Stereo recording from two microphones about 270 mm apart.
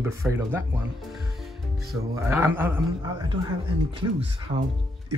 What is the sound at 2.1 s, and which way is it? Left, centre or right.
Speech, centre.